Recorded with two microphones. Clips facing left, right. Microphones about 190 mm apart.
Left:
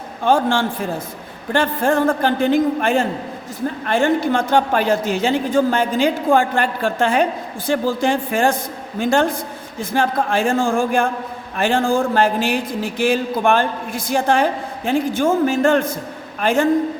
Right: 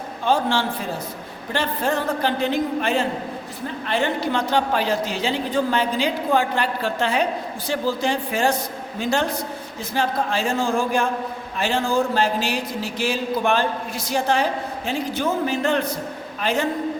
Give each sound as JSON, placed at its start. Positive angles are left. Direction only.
{"t": 0.3, "sound": "a woman's voice", "side_deg": 50}